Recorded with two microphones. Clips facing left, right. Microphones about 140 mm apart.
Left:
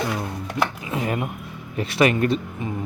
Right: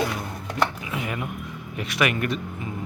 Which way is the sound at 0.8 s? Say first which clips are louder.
Left 5 dB; 35° left (ahead or behind).